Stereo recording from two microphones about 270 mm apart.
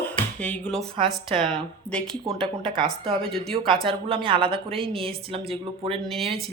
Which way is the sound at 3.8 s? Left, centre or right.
Centre.